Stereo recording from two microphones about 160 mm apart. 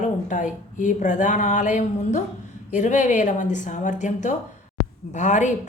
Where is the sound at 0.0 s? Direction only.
50° left (ahead or behind).